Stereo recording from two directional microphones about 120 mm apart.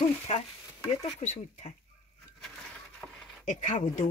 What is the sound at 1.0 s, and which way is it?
Speech, 60° left (ahead or behind).